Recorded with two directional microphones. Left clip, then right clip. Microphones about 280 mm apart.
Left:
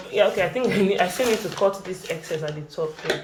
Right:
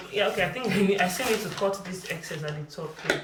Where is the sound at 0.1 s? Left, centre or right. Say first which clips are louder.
Left 6 dB; centre.